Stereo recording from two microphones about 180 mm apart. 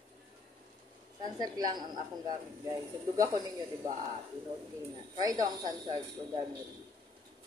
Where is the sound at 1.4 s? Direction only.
20° right (ahead or behind).